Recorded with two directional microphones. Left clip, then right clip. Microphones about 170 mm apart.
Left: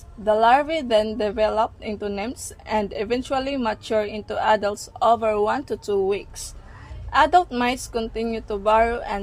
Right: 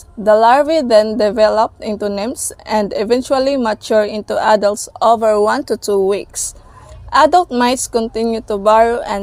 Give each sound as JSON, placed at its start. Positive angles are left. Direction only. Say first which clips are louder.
{"t": 0.3, "sound": "speech", "louder": "right 8 dB", "side_deg": -45}